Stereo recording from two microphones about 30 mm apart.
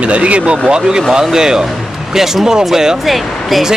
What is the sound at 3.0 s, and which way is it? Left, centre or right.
Speech, centre.